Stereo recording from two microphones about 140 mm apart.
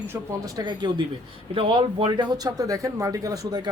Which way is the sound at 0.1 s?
25° right (ahead or behind).